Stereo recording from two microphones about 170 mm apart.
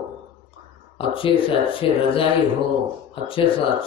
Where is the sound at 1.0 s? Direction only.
30° left (ahead or behind).